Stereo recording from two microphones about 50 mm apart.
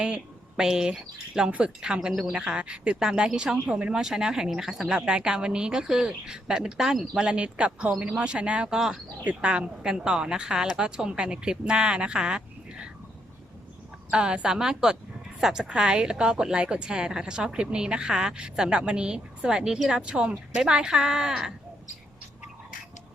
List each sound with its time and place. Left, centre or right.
0.0 s a woman's voice: centre
1.5 s a woman's voice: right
1.8 s a woman's voice: centre
7.2 s a woman's voice: right
14.1 s a woman's voice: right